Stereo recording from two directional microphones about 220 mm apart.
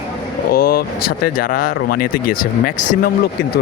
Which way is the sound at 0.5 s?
45° left (ahead or behind).